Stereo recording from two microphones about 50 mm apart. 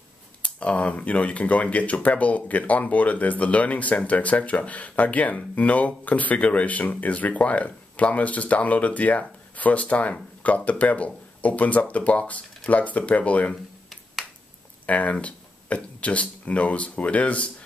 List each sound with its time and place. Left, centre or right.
0.4 s speech: left
14.9 s speech: left